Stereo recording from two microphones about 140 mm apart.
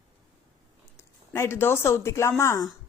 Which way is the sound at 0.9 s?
20° left (ahead or behind).